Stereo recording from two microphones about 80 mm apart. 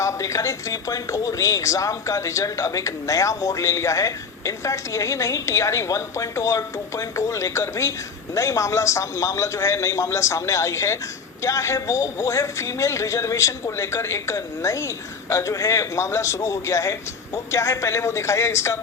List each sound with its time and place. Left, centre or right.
0.0 s speech: left